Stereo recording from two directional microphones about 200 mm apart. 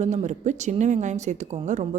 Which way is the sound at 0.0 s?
35° right (ahead or behind).